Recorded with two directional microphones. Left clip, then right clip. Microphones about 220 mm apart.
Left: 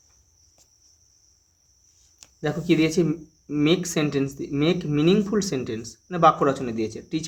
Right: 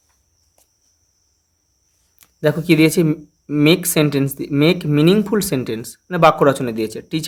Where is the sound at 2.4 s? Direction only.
35° right (ahead or behind).